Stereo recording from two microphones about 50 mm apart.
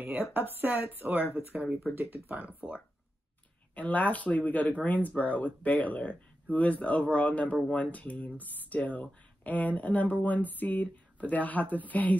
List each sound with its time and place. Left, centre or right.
0.2 s speech: right
3.7 s speech: left